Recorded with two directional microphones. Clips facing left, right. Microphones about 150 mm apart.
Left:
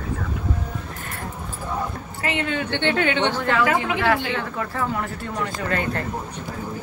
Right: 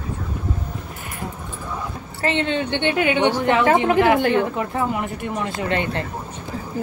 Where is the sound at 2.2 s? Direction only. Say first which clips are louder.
Right 4 dB; 25° right (ahead or behind).